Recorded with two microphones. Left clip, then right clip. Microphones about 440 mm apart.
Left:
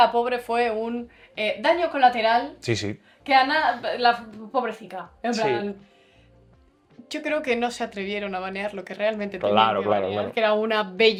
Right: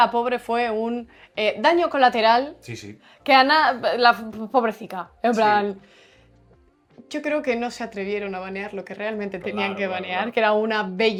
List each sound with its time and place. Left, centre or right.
0.0 s speech: centre
2.6 s speech: left
3.2 s speech: right
7.1 s speech: centre